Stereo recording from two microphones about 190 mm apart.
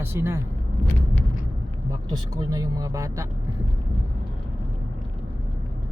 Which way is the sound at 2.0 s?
20° right (ahead or behind).